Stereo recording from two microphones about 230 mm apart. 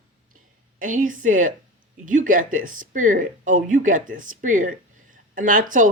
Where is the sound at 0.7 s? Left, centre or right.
Right.